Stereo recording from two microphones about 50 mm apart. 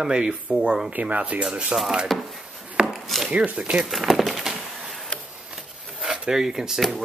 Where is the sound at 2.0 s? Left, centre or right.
Centre.